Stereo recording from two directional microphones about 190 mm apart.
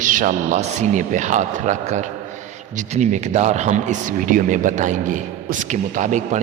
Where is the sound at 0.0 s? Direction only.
45° right (ahead or behind).